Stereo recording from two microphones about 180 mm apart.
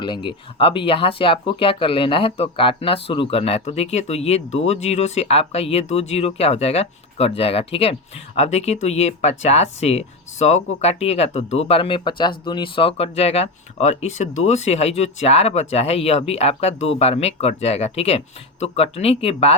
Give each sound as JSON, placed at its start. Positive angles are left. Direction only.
{"t": 0.0, "sound": "speech", "side_deg": 25}